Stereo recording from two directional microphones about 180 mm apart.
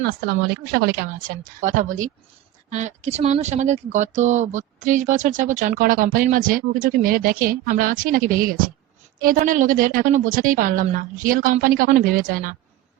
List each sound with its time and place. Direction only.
0.0 s a woman's voice: 60° right (ahead or behind)